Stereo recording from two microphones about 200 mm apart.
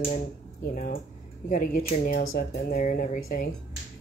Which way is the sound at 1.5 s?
45° left (ahead or behind).